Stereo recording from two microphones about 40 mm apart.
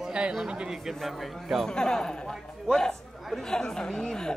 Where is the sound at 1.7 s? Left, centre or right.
Centre.